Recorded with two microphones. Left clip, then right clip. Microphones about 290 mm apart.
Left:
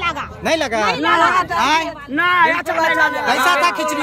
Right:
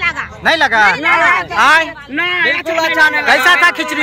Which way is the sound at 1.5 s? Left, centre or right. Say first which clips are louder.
Right 6 dB; centre.